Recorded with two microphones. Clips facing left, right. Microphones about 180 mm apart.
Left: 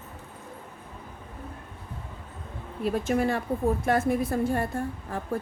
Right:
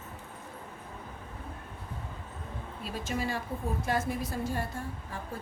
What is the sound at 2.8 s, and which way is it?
Speech, 55° left (ahead or behind).